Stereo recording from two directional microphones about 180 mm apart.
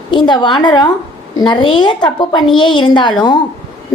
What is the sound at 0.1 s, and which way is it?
A woman's voice, 25° left (ahead or behind).